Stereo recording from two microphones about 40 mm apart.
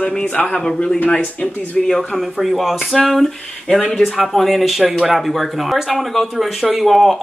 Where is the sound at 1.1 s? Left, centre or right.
Left.